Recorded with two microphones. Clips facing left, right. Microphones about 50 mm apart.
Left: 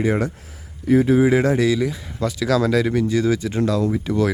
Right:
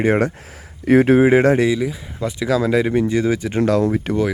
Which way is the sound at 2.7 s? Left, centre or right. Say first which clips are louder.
Right 2 dB; right.